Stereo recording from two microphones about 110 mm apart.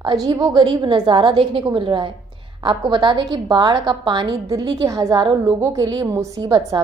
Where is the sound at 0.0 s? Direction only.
35° right (ahead or behind).